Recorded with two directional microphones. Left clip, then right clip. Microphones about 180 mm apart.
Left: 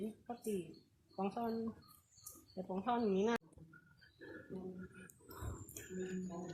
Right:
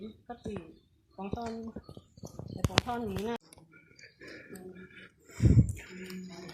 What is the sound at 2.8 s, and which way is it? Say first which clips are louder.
Speech: even; 30° left (ahead or behind).